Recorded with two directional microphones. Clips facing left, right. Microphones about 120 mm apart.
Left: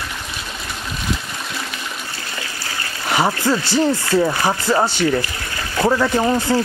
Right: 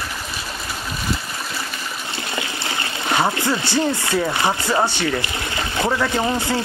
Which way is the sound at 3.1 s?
10° left (ahead or behind).